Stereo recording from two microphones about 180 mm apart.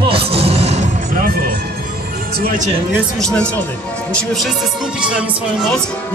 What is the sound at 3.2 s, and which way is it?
Speech, 5° left (ahead or behind).